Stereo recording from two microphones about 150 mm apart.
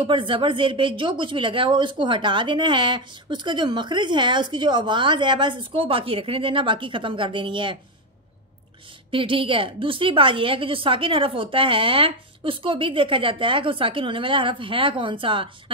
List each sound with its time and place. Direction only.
0.0 s a woman's voice: 35° right (ahead or behind)
9.1 s a woman's voice: 35° right (ahead or behind)